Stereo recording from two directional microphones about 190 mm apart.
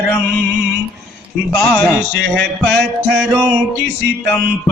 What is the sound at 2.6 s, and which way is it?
Speech, centre (ahead or behind).